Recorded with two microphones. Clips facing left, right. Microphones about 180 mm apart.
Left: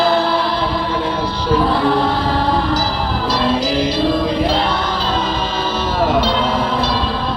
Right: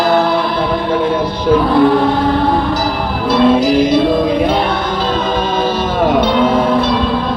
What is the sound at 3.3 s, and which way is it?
Music, 55° right (ahead or behind).